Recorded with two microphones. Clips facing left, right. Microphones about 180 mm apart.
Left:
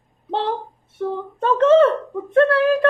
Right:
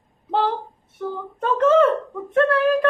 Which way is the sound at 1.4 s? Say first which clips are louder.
Left 3 dB; 30° left (ahead or behind).